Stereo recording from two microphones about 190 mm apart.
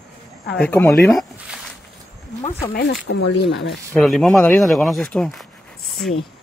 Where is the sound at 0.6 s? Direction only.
10° left (ahead or behind).